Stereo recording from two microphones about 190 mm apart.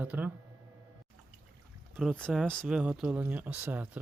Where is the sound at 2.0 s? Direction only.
Centre (ahead or behind).